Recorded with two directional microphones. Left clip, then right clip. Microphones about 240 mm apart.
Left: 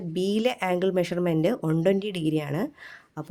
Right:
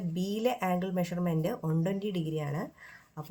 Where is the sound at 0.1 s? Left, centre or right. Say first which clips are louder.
Left 6 dB; left.